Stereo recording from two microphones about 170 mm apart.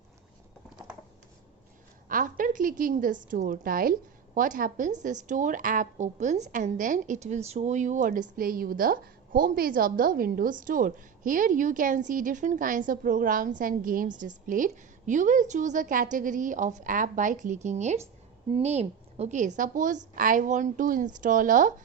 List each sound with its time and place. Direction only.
2.0 s a woman's voice: 55° right (ahead or behind)